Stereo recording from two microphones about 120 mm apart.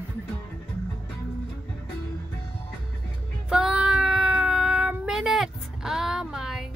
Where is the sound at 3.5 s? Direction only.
5° right (ahead or behind).